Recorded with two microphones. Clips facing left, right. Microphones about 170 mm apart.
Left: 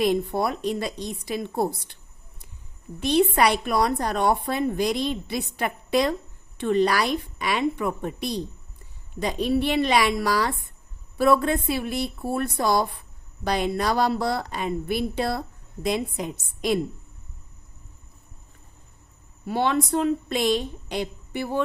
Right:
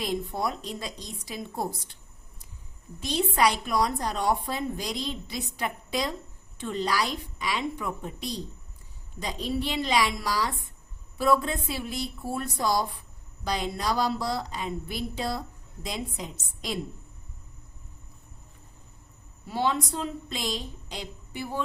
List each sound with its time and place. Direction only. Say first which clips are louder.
0.0 s a woman's voice: left 7 dB; 65° left (ahead or behind)
3.0 s a woman's voice: left 5 dB; 60° left (ahead or behind)
19.5 s a woman's voice: left 5 dB; 65° left (ahead or behind)